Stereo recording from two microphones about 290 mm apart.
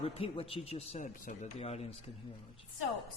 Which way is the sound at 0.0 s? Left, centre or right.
Centre.